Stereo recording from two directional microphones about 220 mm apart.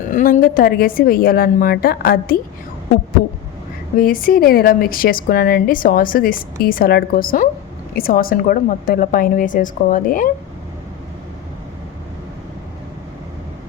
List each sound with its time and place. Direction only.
0.1 s a woman's voice: 35° left (ahead or behind)
3.9 s a woman's voice: 40° left (ahead or behind)